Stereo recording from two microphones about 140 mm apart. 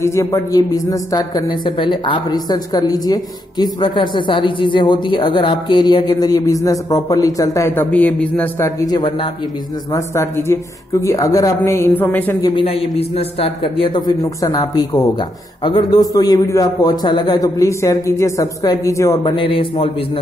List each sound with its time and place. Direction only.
0.0 s a man's voice: 20° left (ahead or behind)
8.6 s a man's voice: 25° left (ahead or behind)
12.4 s a man's voice: 30° left (ahead or behind)
13.1 s a man's voice: 45° left (ahead or behind); by 19.3 s 25° left (ahead or behind)
19.3 s a man's voice: 40° left (ahead or behind)